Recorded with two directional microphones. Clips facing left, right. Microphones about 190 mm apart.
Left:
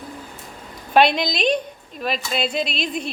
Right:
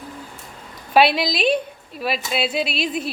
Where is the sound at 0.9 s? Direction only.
5° right (ahead or behind).